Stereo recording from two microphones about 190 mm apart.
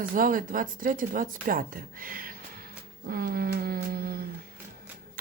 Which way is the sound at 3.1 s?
50° right (ahead or behind).